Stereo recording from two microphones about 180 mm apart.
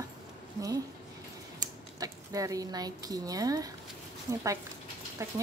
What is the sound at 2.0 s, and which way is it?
A woman's voice, 20° right (ahead or behind).